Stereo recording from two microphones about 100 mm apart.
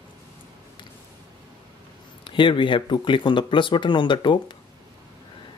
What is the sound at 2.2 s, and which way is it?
Speech, 55° left (ahead or behind).